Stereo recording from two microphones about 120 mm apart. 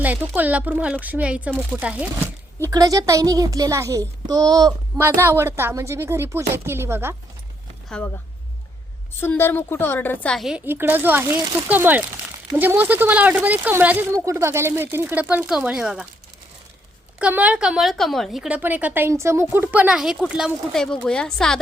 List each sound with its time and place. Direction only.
0.0 s a woman's voice: 15° right (ahead or behind)
2.6 s a child's voice: 30° right (ahead or behind)
4.9 s a child's voice: 20° right (ahead or behind)
7.9 s speech: 10° left (ahead or behind)
9.4 s a woman's voice: 20° left (ahead or behind)
10.3 s a woman's voice: centre (ahead or behind)
10.7 s a woman's voice: 15° right (ahead or behind)
17.2 s a woman's voice: 10° right (ahead or behind); by 21.6 s 5° left (ahead or behind)